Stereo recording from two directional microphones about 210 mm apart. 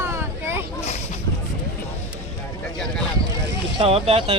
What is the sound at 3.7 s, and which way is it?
Speech, 30° right (ahead or behind).